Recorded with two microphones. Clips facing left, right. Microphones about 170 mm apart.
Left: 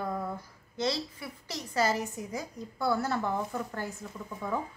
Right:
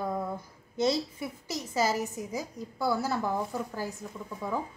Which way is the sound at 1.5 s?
5° right (ahead or behind).